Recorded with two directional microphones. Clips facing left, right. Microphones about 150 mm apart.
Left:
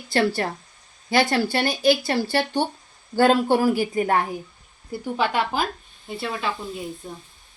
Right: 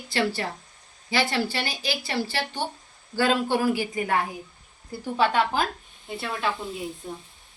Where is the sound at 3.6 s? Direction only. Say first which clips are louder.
Left 4 dB; 35° left (ahead or behind).